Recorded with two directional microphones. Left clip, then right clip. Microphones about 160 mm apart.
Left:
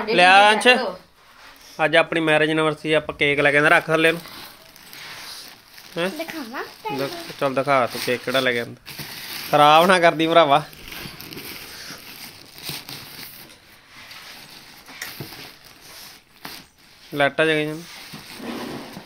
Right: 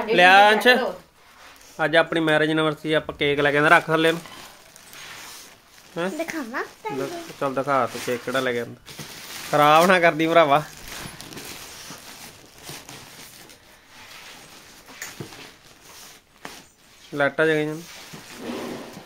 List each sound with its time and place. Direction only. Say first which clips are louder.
0.1 s speech: left 1 dB; 5° right (ahead or behind)
6.1 s speech: right 2 dB; 30° right (ahead or behind)
7.0 s speech: left 3 dB; 5° left (ahead or behind); by 10.6 s 10° right (ahead or behind)
17.1 s speech: left 2 dB; 5° right (ahead or behind)